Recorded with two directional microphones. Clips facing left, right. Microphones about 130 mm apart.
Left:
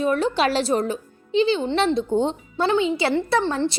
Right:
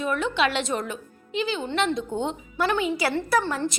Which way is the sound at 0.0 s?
35° left (ahead or behind).